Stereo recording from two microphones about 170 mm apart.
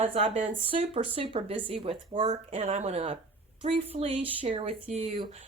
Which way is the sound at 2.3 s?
40° right (ahead or behind).